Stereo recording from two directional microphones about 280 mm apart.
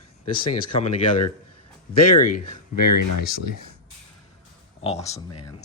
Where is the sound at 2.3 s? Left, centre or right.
Left.